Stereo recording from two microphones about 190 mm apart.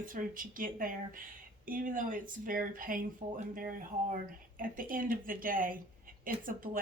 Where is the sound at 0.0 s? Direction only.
45° right (ahead or behind).